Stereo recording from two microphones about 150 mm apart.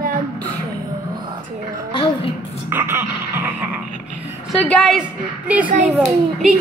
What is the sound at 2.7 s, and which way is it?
Music, 15° right (ahead or behind).